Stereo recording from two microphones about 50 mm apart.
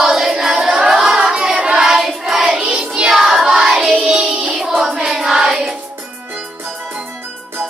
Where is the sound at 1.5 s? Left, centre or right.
Centre.